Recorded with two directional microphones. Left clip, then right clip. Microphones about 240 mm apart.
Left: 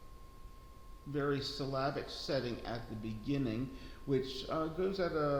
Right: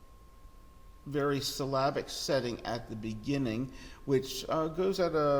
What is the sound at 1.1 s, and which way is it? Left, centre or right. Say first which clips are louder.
Speech: right 5 dB; right.